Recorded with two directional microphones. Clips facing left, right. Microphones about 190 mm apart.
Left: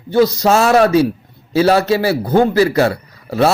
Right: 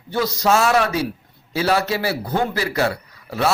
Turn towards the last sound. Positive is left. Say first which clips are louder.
# left 7 dB
turn(degrees=35)  # may be behind; listen again after turning